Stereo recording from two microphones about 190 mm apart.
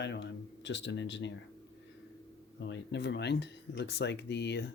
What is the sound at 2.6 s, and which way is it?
Speech, 65° left (ahead or behind).